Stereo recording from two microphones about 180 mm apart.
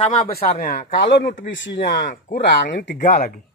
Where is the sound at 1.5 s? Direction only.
85° left.